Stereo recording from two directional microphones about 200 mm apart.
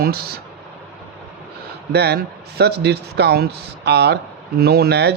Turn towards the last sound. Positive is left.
turn(degrees=-55)  # may be behind; listen again after turning